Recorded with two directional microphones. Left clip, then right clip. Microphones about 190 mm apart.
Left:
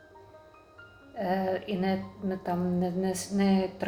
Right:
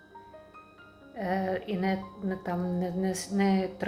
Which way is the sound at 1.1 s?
20° right (ahead or behind).